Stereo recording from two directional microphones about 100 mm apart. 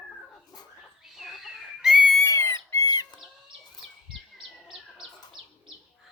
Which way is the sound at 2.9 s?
40° left (ahead or behind).